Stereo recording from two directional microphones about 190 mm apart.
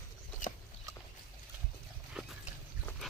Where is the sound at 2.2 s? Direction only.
5° right (ahead or behind).